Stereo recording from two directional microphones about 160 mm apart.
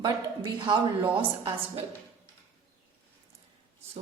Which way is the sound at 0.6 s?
30° right (ahead or behind).